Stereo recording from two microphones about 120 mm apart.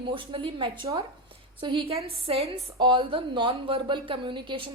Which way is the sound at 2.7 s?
45° right (ahead or behind).